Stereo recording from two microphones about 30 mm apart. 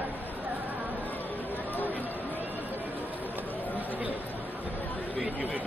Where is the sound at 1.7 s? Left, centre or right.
Left.